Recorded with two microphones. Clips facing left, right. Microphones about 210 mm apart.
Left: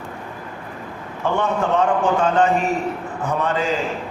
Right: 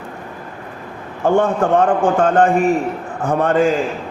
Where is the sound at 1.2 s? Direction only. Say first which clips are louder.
Right 6 dB; 50° right (ahead or behind).